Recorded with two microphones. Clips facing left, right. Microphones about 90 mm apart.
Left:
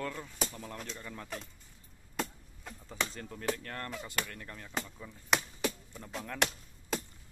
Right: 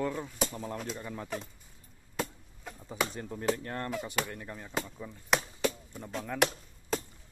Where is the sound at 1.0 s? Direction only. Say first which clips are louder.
Right 5 dB; 20° right (ahead or behind).